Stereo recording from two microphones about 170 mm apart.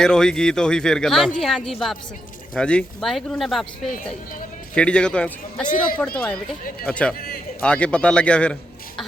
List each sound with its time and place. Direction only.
0.0 s speech: 5° left (ahead or behind)
4.7 s speech: 5° left (ahead or behind)
5.6 s speech: 50° left (ahead or behind)
6.0 s speech: 10° left (ahead or behind)